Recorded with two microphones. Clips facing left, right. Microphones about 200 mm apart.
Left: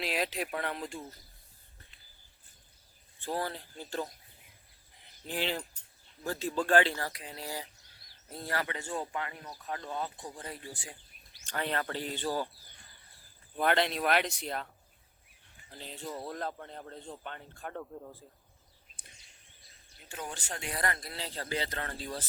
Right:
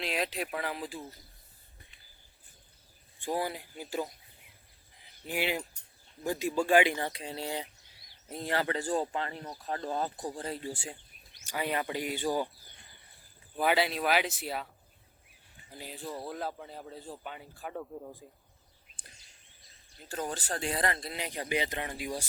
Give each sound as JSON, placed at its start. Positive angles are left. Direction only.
{"t": 0.0, "sound": "speech", "side_deg": 0}
{"t": 3.2, "sound": "speech", "side_deg": -10}
{"t": 4.9, "sound": "a sound", "side_deg": 0}
{"t": 5.3, "sound": "speech", "side_deg": -10}
{"t": 8.6, "sound": "speech", "side_deg": -35}
{"t": 11.3, "sound": "speech", "side_deg": -10}
{"t": 13.6, "sound": "a man's voice", "side_deg": -5}
{"t": 19.0, "sound": "a sound", "side_deg": 0}
{"t": 20.1, "sound": "speech", "side_deg": -40}